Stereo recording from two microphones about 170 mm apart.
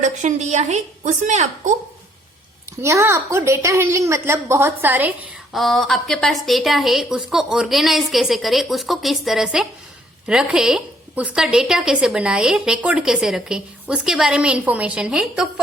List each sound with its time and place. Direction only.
0.0 s a woman's voice: 45° right (ahead or behind)
2.8 s a woman's voice: 15° right (ahead or behind)